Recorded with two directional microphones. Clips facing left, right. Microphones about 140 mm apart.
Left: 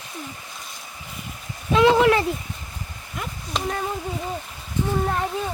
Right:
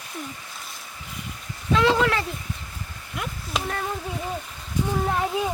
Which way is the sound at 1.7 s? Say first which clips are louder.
Left 4 dB; 15° left (ahead or behind).